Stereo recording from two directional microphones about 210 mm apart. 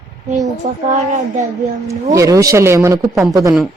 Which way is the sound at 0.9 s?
35° right (ahead or behind).